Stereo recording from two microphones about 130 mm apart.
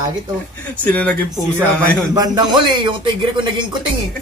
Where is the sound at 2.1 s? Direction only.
30° right (ahead or behind).